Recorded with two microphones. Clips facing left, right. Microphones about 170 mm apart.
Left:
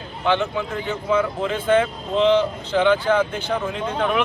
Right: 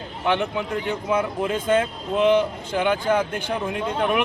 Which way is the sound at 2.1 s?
10° right (ahead or behind).